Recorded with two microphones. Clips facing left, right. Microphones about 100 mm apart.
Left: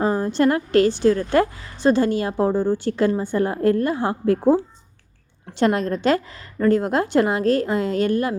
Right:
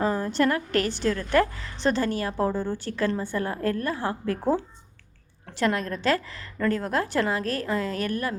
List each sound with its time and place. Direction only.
0.0 s a woman's voice: 20° left (ahead or behind)